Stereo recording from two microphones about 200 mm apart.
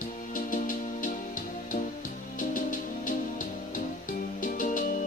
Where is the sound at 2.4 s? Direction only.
40° left (ahead or behind).